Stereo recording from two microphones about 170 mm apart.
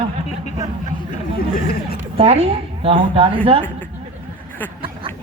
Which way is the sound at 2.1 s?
35° right (ahead or behind).